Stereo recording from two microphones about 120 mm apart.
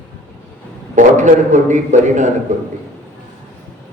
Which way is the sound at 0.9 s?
90° right.